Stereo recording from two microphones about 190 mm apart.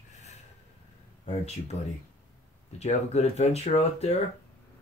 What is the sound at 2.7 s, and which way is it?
Speech, 35° left (ahead or behind).